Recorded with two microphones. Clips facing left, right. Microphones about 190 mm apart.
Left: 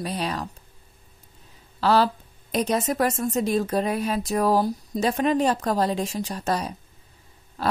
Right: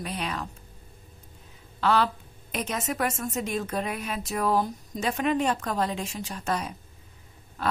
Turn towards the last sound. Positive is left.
turn(degrees=35)  # may be behind; listen again after turning